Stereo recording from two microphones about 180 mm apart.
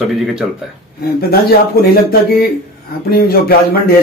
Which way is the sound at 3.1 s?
55° left (ahead or behind).